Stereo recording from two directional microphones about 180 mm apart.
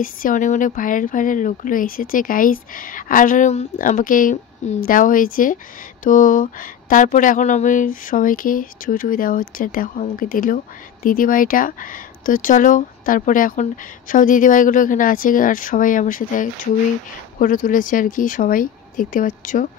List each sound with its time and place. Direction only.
0.0 s speech: 50° left (ahead or behind)